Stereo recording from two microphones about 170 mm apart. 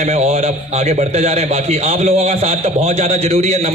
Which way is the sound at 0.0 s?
40° right (ahead or behind).